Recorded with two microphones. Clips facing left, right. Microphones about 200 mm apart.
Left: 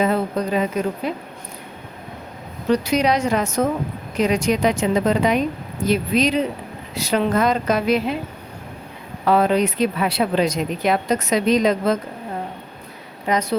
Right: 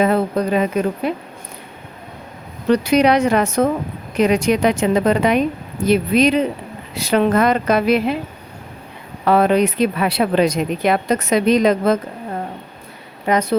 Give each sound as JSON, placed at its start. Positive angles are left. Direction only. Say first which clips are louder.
{"t": 0.0, "sound": "speech", "louder": "right 3 dB", "side_deg": -60}
{"t": 2.6, "sound": "speech", "louder": "right 4 dB", "side_deg": -60}
{"t": 9.2, "sound": "speech", "louder": "right 3 dB", "side_deg": -60}
{"t": 13.2, "sound": "speech", "louder": "right 4 dB", "side_deg": -55}